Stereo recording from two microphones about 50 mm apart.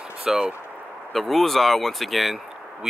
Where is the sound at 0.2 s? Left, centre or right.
Centre.